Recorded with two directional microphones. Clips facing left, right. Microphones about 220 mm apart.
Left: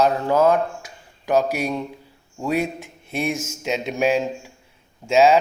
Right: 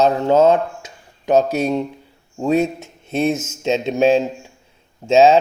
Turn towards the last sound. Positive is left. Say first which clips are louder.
# right 4 dB
turn(degrees=-25)  # may be behind; listen again after turning